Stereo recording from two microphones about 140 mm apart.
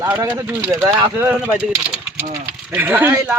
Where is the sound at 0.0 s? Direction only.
15° right (ahead or behind).